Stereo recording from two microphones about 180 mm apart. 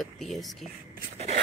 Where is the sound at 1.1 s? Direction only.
35° right (ahead or behind).